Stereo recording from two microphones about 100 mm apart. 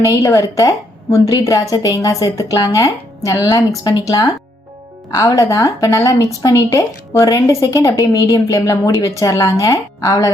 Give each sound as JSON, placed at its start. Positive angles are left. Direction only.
{"t": 0.0, "sound": "speech", "side_deg": 35}